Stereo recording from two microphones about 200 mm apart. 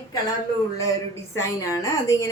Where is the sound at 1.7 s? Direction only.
15° left (ahead or behind).